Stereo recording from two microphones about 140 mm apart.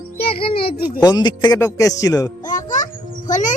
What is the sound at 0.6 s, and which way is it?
Speech, 90° left.